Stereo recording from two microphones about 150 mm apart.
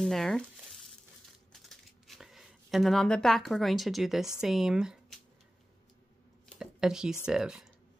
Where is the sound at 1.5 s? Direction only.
Centre (ahead or behind).